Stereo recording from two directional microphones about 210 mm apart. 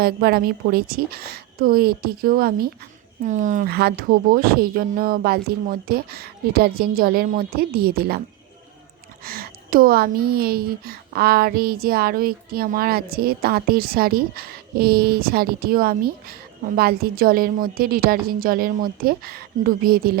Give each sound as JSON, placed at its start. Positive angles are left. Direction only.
{"t": 0.0, "sound": "a woman's voice", "side_deg": -45}
{"t": 9.2, "sound": "a woman's voice", "side_deg": -45}